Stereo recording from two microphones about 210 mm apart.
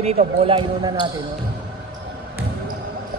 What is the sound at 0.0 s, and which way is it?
Speech, 30° right (ahead or behind).